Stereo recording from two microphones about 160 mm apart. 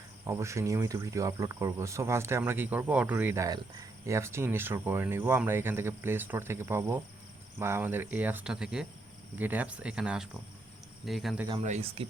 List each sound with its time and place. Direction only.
0.3 s speech: 20° right (ahead or behind); by 11.4 s centre (ahead or behind)
11.6 s speech: 40° right (ahead or behind)